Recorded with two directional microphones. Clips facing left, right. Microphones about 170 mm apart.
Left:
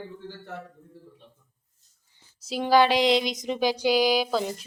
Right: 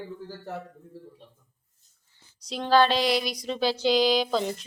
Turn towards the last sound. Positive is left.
turn(degrees=5)  # may be behind; listen again after turning